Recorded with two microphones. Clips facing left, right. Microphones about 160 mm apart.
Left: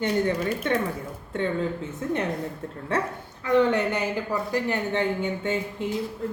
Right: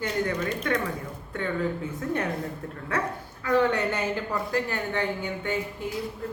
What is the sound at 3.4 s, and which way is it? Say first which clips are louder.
Speech: left 2 dB; 20° left (ahead or behind).